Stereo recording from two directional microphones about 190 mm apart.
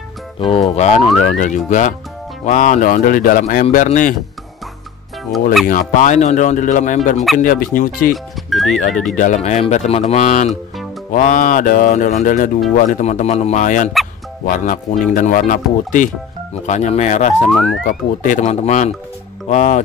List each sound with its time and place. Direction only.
0.4 s a man's voice: 30° left (ahead or behind)
5.7 s a man's voice: 45° left (ahead or behind)
8.1 s speech: centre (ahead or behind)
9.1 s a man's voice: 40° left (ahead or behind)
17.5 s speech: centre (ahead or behind)
17.8 s speech: 45° left (ahead or behind)